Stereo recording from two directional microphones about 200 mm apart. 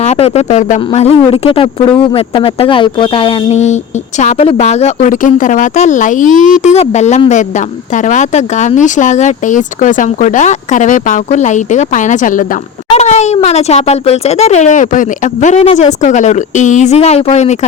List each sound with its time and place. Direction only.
0.0 s speech: 35° left (ahead or behind)